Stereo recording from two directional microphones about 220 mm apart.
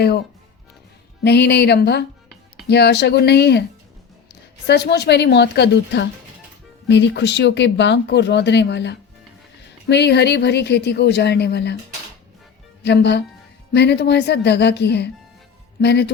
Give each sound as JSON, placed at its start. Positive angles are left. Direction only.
{"t": 1.2, "sound": "speech", "side_deg": 50}
{"t": 12.8, "sound": "speech", "side_deg": 50}